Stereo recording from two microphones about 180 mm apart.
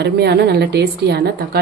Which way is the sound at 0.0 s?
70° right (ahead or behind).